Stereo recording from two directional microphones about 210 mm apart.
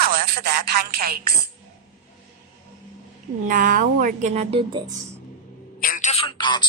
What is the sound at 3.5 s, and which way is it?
Speech, 40° right (ahead or behind).